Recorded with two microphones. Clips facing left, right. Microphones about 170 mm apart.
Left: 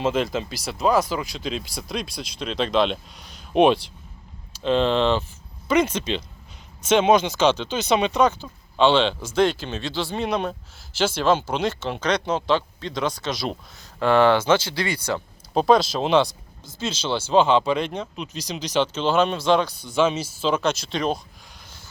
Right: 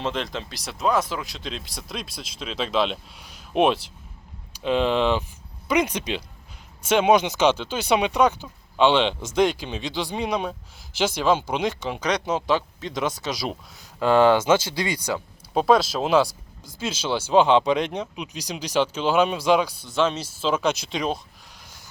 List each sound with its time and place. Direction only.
0.0 s speech: 5° left (ahead or behind); by 15.2 s 15° right (ahead or behind)
15.5 s speech: 5° right (ahead or behind)